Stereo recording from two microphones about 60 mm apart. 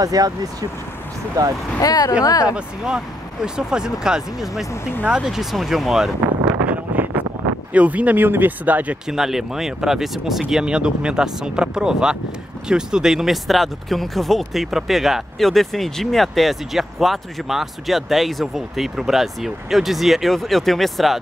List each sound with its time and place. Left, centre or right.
0.0 s speech: right
1.4 s speech: right
1.8 s speech: left
2.4 s speech: centre
6.9 s wind noise: right
7.7 s speech: right
9.0 s speech: centre